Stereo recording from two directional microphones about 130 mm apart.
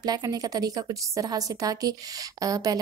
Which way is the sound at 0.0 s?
30° right (ahead or behind).